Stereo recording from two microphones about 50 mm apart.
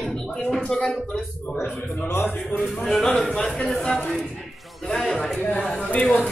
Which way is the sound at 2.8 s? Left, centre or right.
Centre.